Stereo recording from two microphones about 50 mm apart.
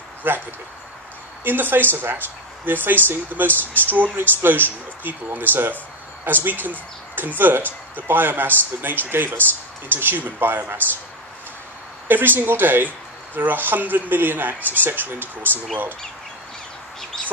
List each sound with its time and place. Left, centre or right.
0.2 s speech: right
12.1 s speech: right
17.1 s chicken: centre